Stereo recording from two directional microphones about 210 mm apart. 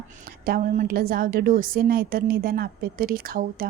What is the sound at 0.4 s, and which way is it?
A woman's voice, 40° right (ahead or behind).